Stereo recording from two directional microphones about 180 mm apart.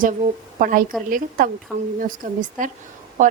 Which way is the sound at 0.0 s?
50° right (ahead or behind).